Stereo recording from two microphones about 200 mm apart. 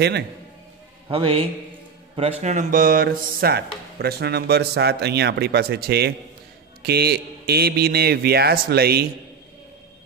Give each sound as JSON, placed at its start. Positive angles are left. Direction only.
{"t": 1.0, "sound": "a man's voice", "side_deg": -25}